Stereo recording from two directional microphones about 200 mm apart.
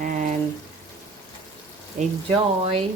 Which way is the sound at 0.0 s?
40° right (ahead or behind).